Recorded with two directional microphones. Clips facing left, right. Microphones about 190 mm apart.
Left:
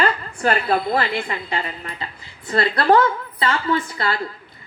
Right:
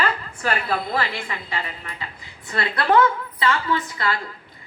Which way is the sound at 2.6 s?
35° left (ahead or behind).